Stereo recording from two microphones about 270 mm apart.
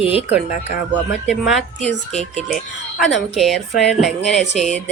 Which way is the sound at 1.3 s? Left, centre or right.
Centre.